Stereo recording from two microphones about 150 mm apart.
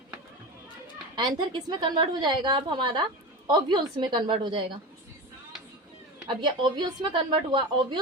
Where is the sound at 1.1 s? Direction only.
30° right (ahead or behind).